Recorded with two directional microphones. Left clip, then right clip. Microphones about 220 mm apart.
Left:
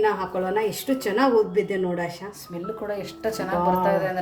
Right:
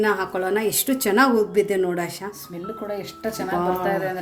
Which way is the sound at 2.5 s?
5° left (ahead or behind).